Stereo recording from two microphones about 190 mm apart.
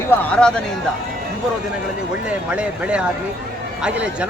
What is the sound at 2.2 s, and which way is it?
Speech, 5° right (ahead or behind).